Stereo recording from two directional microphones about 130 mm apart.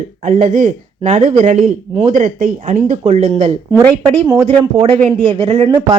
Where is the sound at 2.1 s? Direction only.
80° right.